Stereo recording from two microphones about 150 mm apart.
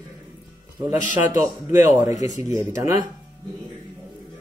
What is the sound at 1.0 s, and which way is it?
Speech, 60° left (ahead or behind).